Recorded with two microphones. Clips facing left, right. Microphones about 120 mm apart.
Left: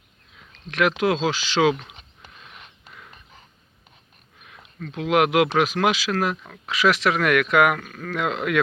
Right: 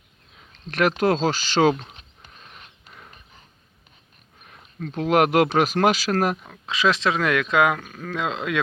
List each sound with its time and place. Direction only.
0.7 s speech: 40° right (ahead or behind)
4.4 s speech: 40° right (ahead or behind)
6.3 s speech: 20° right (ahead or behind)